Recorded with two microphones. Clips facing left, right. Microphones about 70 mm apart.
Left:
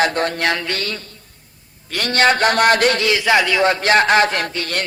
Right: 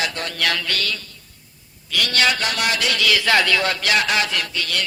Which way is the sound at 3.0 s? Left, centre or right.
Left.